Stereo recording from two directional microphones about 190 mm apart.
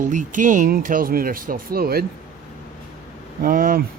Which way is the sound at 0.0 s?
40° right (ahead or behind).